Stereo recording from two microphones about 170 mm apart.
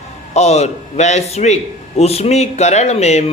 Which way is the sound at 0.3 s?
40° left (ahead or behind).